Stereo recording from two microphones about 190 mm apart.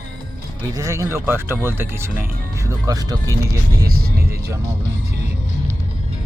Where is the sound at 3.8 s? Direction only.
50° right (ahead or behind).